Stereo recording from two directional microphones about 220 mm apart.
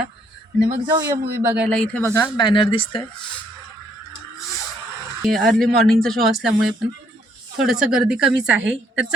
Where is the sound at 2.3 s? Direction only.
20° left (ahead or behind).